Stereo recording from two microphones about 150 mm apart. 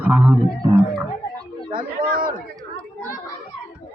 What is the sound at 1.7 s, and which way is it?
Chatter, 70° right (ahead or behind).